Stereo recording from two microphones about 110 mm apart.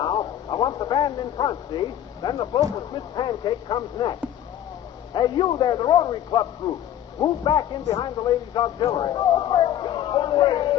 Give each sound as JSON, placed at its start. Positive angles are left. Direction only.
{"t": 0.0, "sound": "a man's voice", "side_deg": 45}